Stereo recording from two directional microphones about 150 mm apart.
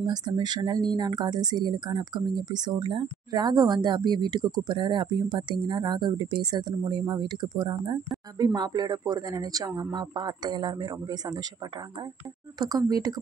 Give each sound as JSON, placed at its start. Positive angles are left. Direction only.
{"t": 0.0, "sound": "speech", "side_deg": -30}
{"t": 12.5, "sound": "speech", "side_deg": -25}